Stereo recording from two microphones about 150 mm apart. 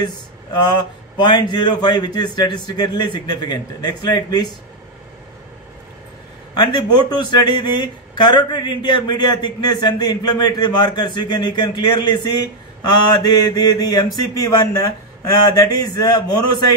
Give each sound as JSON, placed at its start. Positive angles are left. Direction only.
{"t": 0.0, "sound": "speech", "side_deg": 30}
{"t": 6.6, "sound": "speech", "side_deg": 25}